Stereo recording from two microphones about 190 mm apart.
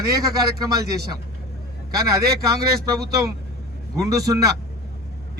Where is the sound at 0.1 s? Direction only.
20° right (ahead or behind).